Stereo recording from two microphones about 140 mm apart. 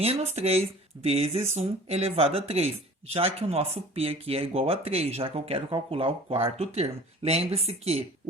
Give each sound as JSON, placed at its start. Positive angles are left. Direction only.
{"t": 0.0, "sound": "speech", "side_deg": -50}